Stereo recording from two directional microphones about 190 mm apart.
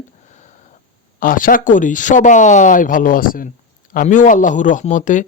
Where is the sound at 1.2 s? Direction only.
45° left (ahead or behind).